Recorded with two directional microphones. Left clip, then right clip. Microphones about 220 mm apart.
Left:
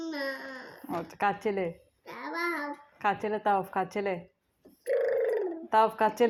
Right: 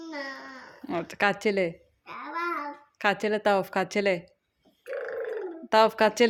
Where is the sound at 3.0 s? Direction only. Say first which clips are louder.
Right 4 dB; 55° right (ahead or behind).